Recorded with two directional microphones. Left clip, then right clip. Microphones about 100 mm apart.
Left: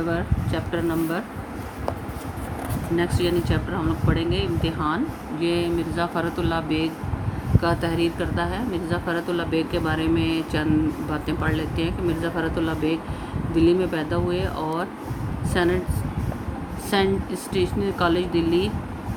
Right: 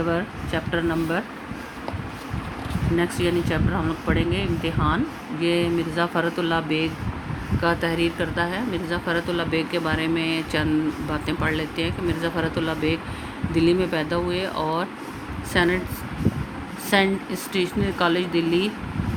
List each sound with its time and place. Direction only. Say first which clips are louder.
0.1 s speech: right 1 dB; 90° right
3.0 s speech: even; 80° right
5.4 s speech: right 1 dB; 65° right (ahead or behind)
7.6 s speech: right 1 dB; 45° right (ahead or behind)
16.9 s speech: right 1 dB; 35° right (ahead or behind)